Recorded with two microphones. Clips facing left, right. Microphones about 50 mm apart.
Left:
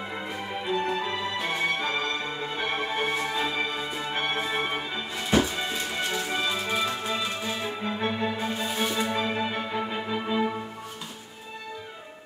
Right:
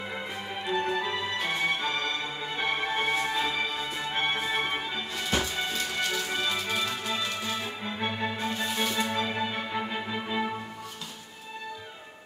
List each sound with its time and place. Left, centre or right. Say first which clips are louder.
0.7 s music: even; centre
5.7 s music: left 1 dB; centre
7.8 s music: left 4 dB; centre